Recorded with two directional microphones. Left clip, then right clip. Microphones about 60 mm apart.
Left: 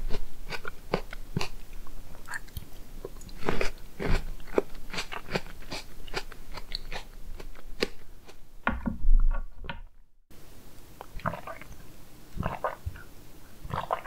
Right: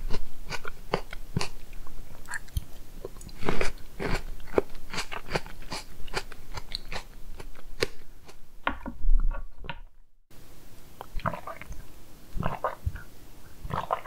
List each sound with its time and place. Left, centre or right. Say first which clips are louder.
0.1 s biting: right 1 dB; right
2.2 s chewing: right 1 dB; right
3.0 s biting: right 1 dB; right
8.6 s a sound: left 1 dB; centre
11.0 s stomach rumble: right 1 dB; right
13.7 s biting: right 1 dB; right